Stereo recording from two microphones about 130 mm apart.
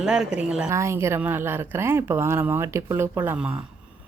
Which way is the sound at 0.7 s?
20° right (ahead or behind).